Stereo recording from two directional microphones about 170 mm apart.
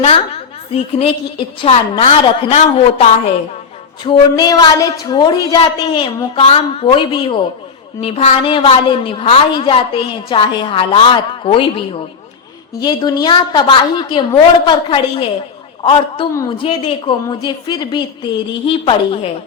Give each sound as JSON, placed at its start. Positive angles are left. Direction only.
{"t": 0.7, "sound": "a woman's voice", "side_deg": 35}
{"t": 4.0, "sound": "a woman's voice", "side_deg": 25}
{"t": 12.8, "sound": "a woman's voice", "side_deg": 25}